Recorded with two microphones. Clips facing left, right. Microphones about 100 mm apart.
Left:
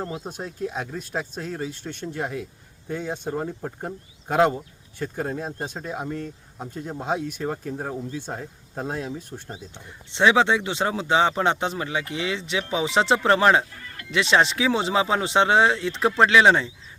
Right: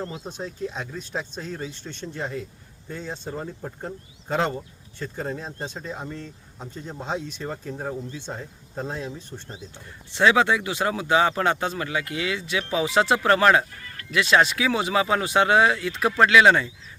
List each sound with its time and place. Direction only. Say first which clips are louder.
0.1 s speech: left 1 dB; 10° left (ahead or behind)